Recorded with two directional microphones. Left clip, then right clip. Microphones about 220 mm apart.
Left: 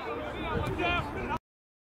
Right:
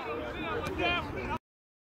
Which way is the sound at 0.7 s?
5° right (ahead or behind).